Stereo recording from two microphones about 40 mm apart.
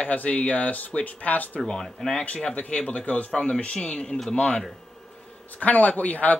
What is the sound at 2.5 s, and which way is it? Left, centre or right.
Speech, left.